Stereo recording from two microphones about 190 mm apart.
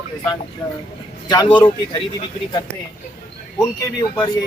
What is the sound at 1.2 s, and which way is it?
Speech, 20° left (ahead or behind).